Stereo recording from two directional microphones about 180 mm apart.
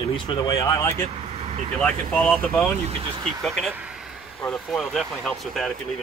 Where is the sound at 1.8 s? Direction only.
5° left (ahead or behind).